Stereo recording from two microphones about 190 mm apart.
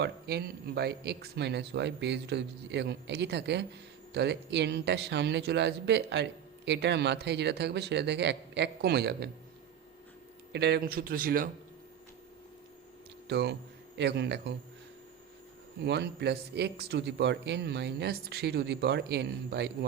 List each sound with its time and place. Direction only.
0.0 s a man's voice: 60° right (ahead or behind)
10.5 s speech: 60° right (ahead or behind)
13.2 s speech: 60° right (ahead or behind)
15.8 s a man's voice: 60° right (ahead or behind)